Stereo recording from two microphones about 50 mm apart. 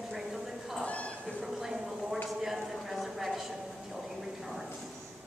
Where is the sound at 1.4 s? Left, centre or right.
Centre.